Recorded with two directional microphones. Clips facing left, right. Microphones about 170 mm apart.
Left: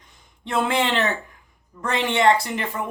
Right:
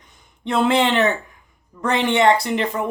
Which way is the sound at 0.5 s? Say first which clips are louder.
Right 4 dB; 20° right (ahead or behind).